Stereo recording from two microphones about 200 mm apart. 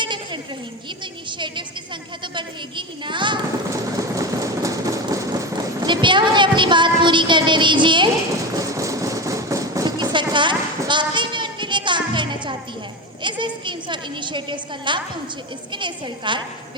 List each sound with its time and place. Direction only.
0.0 s a sound: 25° right (ahead or behind)
1.3 s a woman's voice: 25° right (ahead or behind)
2.2 s train: 25° right (ahead or behind)
13.2 s a woman's voice: 25° right (ahead or behind)